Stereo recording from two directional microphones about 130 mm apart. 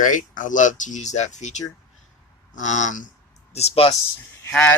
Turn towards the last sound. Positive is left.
turn(degrees=5)  # may be behind; listen again after turning